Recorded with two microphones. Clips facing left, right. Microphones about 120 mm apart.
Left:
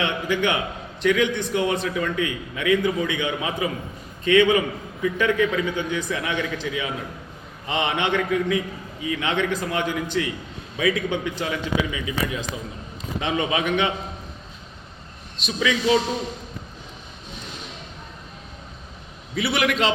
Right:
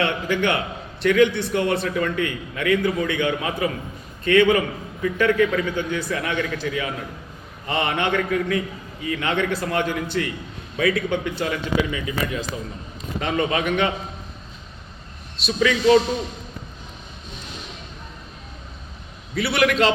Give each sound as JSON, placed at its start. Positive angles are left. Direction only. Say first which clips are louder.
{"t": 0.0, "sound": "a man's voice", "louder": "right 1 dB", "side_deg": 15}
{"t": 15.4, "sound": "a man's voice", "louder": "right 4 dB", "side_deg": 10}
{"t": 19.4, "sound": "a man's voice", "louder": "right 3 dB", "side_deg": 20}